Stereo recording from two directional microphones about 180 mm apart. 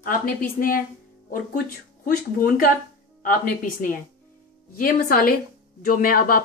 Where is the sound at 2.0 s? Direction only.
50° left (ahead or behind).